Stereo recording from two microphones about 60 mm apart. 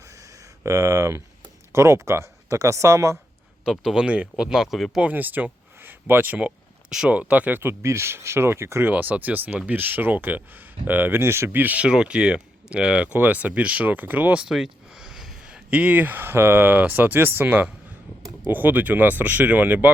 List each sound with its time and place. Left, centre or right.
0.0 s a sound: right
1.7 s speech: right
3.8 s speech: centre
4.4 s speech: centre
4.9 s speech: right
7.1 s speech: right
7.7 s speech: right
8.9 s speech: right
11.6 s speech: right
11.9 s speech: centre
13.1 s speech: right
14.3 s a sound: centre
15.4 s speech: centre